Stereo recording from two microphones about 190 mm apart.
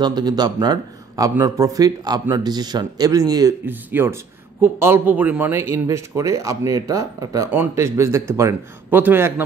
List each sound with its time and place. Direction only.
0.0 s a man's voice: 20° right (ahead or behind)